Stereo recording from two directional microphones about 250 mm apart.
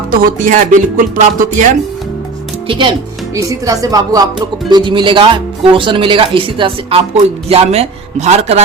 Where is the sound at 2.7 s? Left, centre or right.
Centre.